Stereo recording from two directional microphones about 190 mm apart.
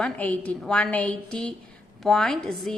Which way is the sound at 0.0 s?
5° left (ahead or behind).